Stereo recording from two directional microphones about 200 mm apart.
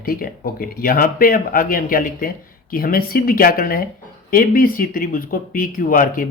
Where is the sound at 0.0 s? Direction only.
45° left (ahead or behind).